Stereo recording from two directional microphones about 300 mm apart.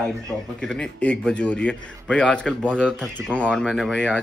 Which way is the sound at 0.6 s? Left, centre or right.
Centre.